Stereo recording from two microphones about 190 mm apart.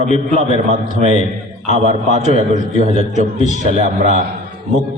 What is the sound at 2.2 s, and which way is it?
Speech, 40° left (ahead or behind).